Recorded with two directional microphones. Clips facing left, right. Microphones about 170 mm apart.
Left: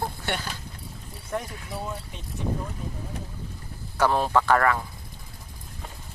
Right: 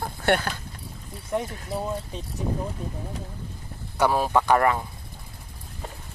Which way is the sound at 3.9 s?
10° right (ahead or behind).